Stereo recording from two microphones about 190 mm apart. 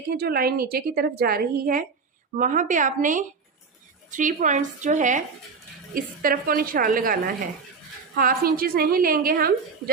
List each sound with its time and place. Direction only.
0.1 s a woman's voice: 55° right (ahead or behind)